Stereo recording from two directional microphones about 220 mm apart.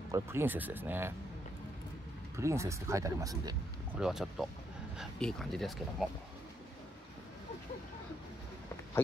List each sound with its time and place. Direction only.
0.1 s speech: 10° right (ahead or behind)
2.3 s speech: 15° right (ahead or behind)
4.0 s speech: centre (ahead or behind)